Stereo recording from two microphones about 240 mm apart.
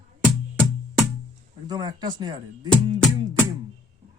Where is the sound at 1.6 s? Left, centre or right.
Centre.